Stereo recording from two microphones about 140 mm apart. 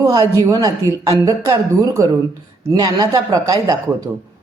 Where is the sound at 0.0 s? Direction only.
25° right (ahead or behind).